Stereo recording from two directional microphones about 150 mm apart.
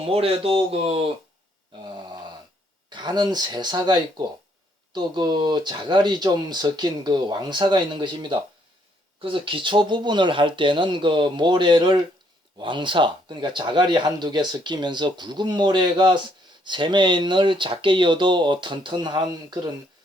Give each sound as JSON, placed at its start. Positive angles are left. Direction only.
{"t": 0.0, "sound": "speech", "side_deg": -40}
{"t": 2.0, "sound": "a sound", "side_deg": -30}
{"t": 2.9, "sound": "speech", "side_deg": -30}